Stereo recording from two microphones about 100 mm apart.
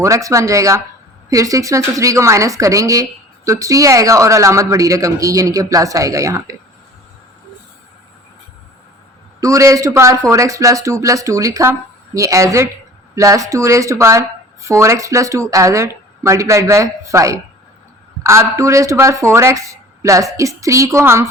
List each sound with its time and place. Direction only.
0.0 s a woman's voice: 30° right (ahead or behind)
9.4 s a woman's voice: 30° right (ahead or behind)